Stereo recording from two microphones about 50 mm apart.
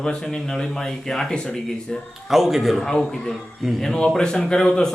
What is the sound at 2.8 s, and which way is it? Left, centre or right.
Speech, centre.